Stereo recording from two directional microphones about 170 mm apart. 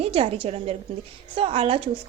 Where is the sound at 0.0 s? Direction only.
35° right (ahead or behind).